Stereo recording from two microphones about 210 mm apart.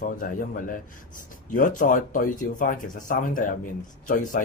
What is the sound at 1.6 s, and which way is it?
Speech, 40° left (ahead or behind).